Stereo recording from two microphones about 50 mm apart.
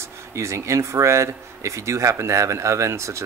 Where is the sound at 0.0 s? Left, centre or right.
Right.